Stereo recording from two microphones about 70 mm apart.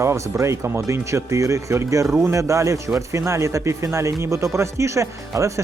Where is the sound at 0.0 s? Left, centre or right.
Right.